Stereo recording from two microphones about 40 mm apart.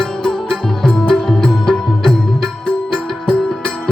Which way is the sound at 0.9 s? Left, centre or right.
Centre.